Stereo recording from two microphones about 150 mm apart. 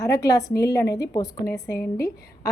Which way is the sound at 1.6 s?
90° left.